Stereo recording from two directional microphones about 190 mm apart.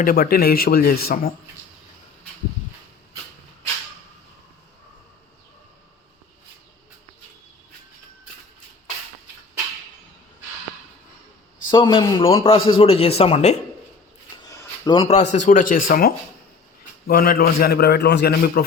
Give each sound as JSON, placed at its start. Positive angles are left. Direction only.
{"t": 0.0, "sound": "speech", "side_deg": 50}
{"t": 11.7, "sound": "a man's voice", "side_deg": 25}
{"t": 14.4, "sound": "a sound", "side_deg": 20}
{"t": 15.0, "sound": "a man's voice", "side_deg": 35}